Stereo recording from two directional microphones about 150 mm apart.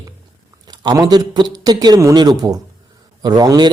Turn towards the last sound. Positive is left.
turn(degrees=-25)  # may be behind; listen again after turning